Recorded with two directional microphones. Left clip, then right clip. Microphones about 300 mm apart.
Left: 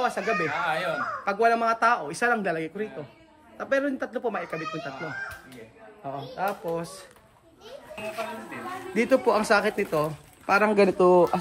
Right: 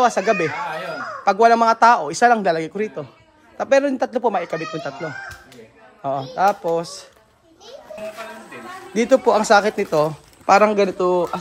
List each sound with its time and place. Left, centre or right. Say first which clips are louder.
0.0 s speech: right 9 dB; centre
6.0 s speech: right 12 dB; centre
8.9 s speech: right 7 dB; centre
10.7 s speech: right 1 dB; centre